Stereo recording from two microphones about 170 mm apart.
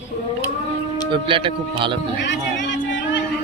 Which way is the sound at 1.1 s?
30° right (ahead or behind).